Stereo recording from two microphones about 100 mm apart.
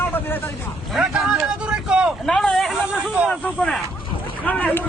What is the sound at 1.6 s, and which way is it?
Vehicle, 10° right (ahead or behind).